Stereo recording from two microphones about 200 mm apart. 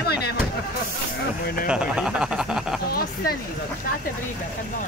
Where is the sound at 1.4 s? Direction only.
50° left (ahead or behind).